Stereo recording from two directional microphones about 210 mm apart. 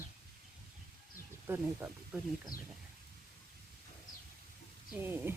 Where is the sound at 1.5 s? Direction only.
10° right (ahead or behind).